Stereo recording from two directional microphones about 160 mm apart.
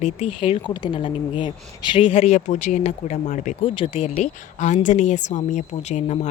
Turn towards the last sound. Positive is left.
turn(degrees=45)  # may be behind; listen again after turning